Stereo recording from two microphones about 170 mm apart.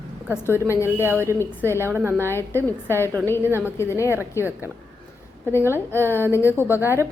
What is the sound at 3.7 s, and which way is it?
Speech, 15° left (ahead or behind).